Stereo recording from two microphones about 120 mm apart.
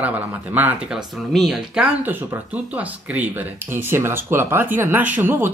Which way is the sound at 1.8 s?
10° right (ahead or behind).